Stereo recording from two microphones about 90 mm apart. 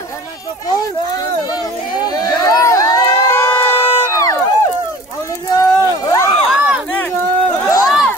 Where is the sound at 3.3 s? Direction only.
30° left (ahead or behind).